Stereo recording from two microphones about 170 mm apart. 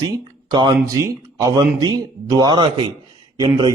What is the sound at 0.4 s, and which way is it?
A man's voice, 25° right (ahead or behind).